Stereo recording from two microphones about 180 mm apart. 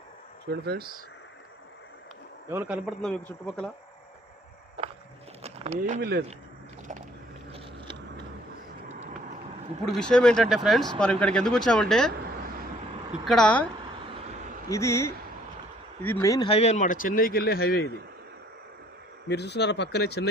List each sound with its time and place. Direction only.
0.5 s speech: 65° right (ahead or behind)
2.5 s speech: 10° right (ahead or behind)
3.0 s speech: 5° left (ahead or behind)
5.4 s a sound: 35° right (ahead or behind)
6.0 s speech: 75° right (ahead or behind)
7.5 s vehicle: 25° right (ahead or behind)
9.8 s speech: 5° left (ahead or behind)
13.2 s speech: 5° left (ahead or behind)
14.7 s speech: 15° left (ahead or behind)
16.5 s speech: 35° left (ahead or behind); by 17.9 s 60° left (ahead or behind)
19.3 s speech: 70° left (ahead or behind)